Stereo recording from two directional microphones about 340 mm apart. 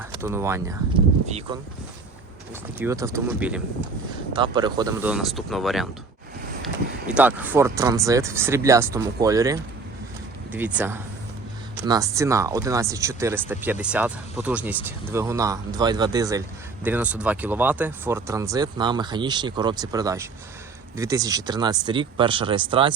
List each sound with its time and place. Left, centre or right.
0.0 s speech: centre
1.3 s speech: centre
2.7 s speech: centre
7.1 s speech: centre